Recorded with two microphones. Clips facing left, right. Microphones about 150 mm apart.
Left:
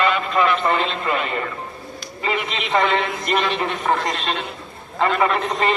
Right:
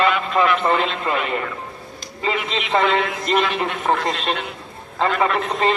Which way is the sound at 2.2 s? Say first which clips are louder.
Right 1 dB; 25° right (ahead or behind).